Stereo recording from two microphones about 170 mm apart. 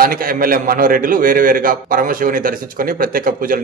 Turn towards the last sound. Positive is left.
turn(degrees=-55)  # may be behind; listen again after turning